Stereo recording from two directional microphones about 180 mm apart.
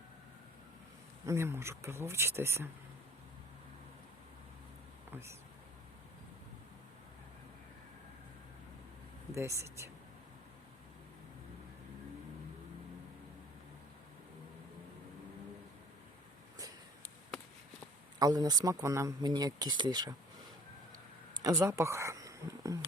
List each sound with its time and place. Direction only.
1.2 s speech: 15° right (ahead or behind)
5.1 s speech: 15° right (ahead or behind)
9.3 s speech: 15° right (ahead or behind)
18.2 s speech: 20° right (ahead or behind)
21.4 s speech: 15° right (ahead or behind)